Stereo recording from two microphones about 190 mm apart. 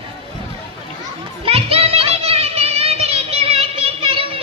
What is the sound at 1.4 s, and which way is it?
Music, 30° right (ahead or behind).